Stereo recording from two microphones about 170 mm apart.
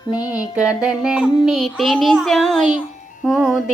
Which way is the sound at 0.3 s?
5° right (ahead or behind).